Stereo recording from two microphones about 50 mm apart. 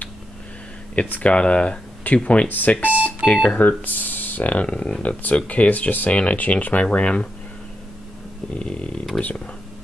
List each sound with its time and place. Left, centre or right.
1.1 s speech: left
2.9 s speech: right
3.3 s speech: left
3.5 s speech: left
8.5 s speech: left
9.2 s speech: centre